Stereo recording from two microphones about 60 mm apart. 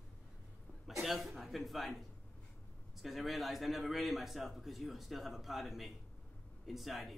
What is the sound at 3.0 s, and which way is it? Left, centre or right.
A man's voice, centre.